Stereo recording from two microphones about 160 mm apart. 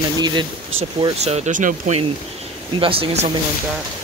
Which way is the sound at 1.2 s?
45° right (ahead or behind).